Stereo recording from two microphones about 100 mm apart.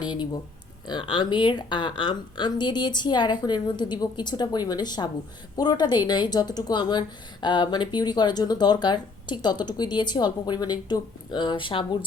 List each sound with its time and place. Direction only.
0.0 s speech: 45° left (ahead or behind)